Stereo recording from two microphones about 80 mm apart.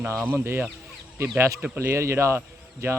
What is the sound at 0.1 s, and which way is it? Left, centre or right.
Speech, right.